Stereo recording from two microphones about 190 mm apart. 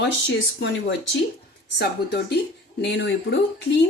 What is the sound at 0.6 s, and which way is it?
Speech, 70° left (ahead or behind).